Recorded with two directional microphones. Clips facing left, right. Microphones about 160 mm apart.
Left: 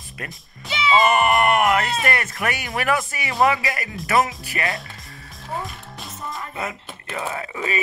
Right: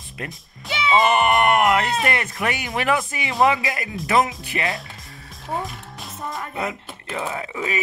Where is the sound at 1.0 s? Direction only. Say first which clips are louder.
Right 1 dB; 20° right (ahead or behind).